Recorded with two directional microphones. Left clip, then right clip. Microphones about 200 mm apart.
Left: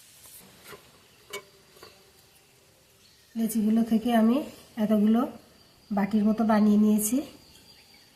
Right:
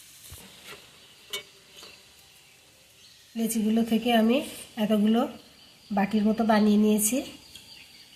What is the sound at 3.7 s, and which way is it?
A woman's voice, 25° right (ahead or behind).